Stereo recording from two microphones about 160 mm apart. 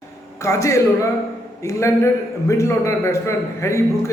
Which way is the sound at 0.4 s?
20° left (ahead or behind).